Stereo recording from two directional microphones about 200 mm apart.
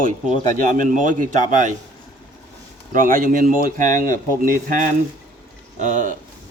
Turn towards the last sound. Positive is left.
turn(degrees=-40)  # may be behind; listen again after turning